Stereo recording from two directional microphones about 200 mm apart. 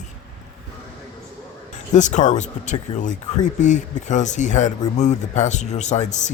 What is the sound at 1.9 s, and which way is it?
Speech, 40° left (ahead or behind).